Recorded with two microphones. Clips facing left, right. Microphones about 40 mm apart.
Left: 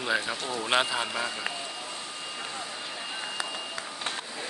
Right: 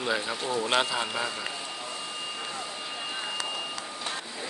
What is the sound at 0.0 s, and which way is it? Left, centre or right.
Speech, centre.